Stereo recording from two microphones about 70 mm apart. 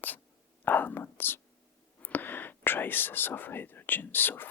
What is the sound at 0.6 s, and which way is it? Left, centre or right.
Speech, left.